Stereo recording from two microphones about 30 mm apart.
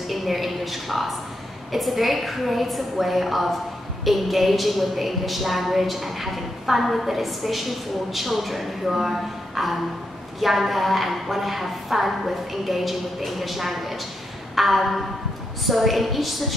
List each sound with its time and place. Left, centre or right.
0.1 s a woman's voice: centre